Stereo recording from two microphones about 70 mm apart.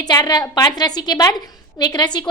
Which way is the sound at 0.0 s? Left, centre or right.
Left.